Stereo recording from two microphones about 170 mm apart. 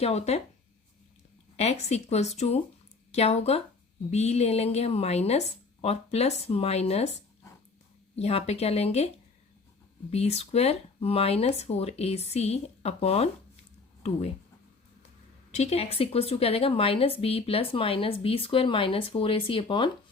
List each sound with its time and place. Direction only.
0.0 s a woman's voice: 40° left (ahead or behind)
1.5 s a woman's voice: 40° left (ahead or behind)
8.1 s a woman's voice: 35° left (ahead or behind)
15.5 s a woman's voice: 40° left (ahead or behind)